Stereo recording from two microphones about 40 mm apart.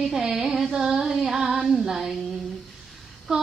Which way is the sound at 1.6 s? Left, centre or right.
Centre.